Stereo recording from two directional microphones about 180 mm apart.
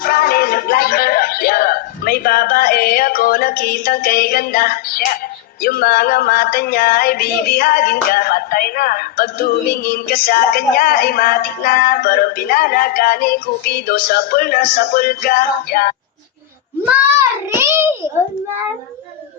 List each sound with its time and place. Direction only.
0.0 s music: 55° left (ahead or behind)
5.6 s a sound: 55° left (ahead or behind)
16.8 s a child's voice: 10° right (ahead or behind)